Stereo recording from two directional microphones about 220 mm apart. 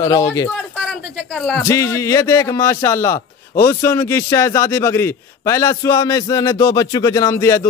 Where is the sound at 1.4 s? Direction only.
5° left (ahead or behind).